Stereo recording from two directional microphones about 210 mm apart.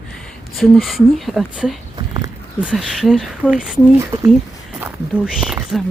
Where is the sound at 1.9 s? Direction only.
20° right (ahead or behind).